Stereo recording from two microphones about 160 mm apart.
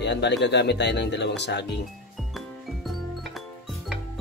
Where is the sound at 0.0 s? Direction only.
90° left.